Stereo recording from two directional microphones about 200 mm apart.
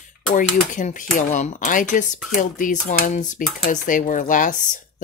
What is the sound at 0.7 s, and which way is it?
Speech, 40° left (ahead or behind).